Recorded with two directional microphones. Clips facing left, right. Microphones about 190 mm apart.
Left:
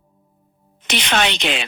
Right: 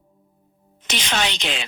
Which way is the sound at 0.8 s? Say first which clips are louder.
Left 5 dB; 65° left (ahead or behind).